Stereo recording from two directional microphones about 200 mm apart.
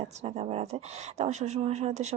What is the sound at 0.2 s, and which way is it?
Speech, 30° right (ahead or behind).